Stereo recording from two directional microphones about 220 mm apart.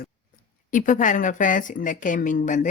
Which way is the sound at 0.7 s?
35° left (ahead or behind).